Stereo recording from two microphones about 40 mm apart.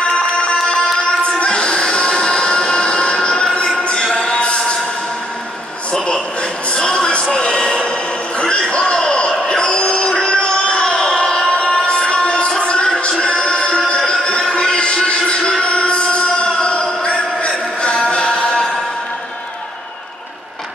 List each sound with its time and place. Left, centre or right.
0.6 s music: centre
0.9 s music: left
6.7 s a sound: left
13.0 s music: left